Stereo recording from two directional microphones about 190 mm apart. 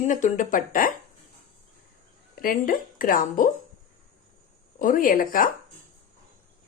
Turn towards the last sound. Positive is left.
turn(degrees=45)  # may be behind; listen again after turning